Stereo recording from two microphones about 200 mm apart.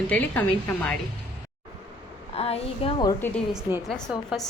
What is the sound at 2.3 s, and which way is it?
Speech, 30° left (ahead or behind).